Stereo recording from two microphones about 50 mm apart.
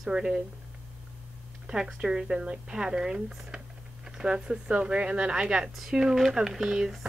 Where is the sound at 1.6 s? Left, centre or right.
Centre.